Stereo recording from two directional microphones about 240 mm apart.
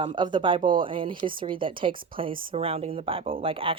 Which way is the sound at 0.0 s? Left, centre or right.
Centre.